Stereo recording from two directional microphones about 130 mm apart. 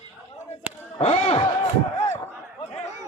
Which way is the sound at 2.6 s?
60° left (ahead or behind).